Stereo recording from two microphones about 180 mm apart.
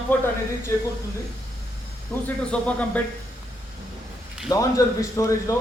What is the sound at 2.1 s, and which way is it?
Speech, 5° left (ahead or behind).